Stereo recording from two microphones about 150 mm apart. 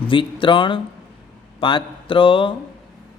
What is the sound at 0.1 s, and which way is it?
A man's voice, 35° left (ahead or behind).